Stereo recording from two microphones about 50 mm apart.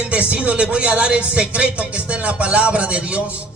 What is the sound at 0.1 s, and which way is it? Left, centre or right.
A man's voice, right.